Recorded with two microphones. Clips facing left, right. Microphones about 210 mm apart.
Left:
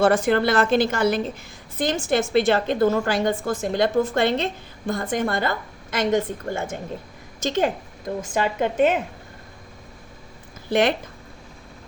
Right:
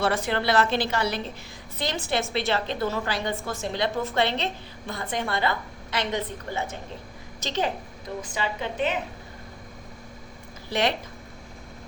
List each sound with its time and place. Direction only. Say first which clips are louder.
0.0 s a woman's voice: left 7 dB; 45° left (ahead or behind)
10.7 s a woman's voice: left 6 dB; 50° left (ahead or behind)